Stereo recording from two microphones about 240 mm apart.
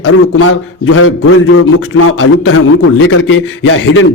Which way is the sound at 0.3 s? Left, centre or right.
Left.